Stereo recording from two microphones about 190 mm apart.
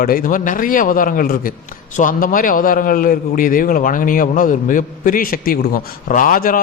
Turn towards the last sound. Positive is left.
turn(degrees=50)  # may be behind; listen again after turning